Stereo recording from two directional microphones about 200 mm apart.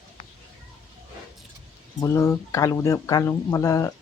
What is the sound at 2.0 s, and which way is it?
Speech, 15° left (ahead or behind).